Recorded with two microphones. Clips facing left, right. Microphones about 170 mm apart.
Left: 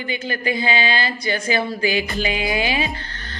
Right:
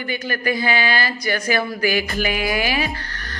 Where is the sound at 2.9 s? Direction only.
25° left (ahead or behind).